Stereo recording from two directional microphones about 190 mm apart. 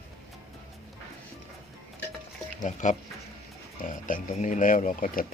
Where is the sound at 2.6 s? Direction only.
40° left (ahead or behind).